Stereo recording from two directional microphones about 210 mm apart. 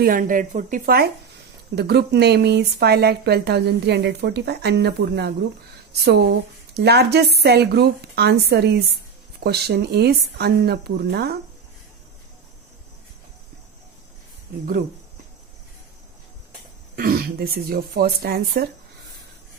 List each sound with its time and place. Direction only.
0.0 s speech: 40° right (ahead or behind)
6.7 s speech: 50° right (ahead or behind)
16.9 s speech: 45° right (ahead or behind)